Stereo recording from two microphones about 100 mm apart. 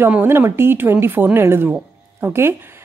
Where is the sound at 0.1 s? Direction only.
20° right (ahead or behind).